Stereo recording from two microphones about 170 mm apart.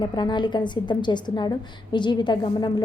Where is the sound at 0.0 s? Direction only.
25° left (ahead or behind).